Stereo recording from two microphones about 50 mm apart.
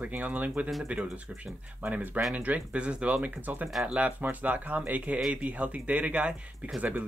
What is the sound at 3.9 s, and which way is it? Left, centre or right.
Speech, right.